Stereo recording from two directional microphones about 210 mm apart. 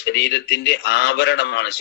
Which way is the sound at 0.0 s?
55° left (ahead or behind).